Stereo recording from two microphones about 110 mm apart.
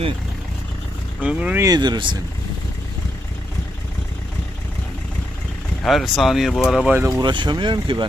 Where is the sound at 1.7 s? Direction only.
40° right (ahead or behind).